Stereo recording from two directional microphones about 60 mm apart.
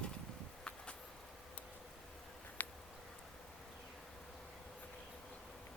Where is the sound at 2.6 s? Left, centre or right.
Left.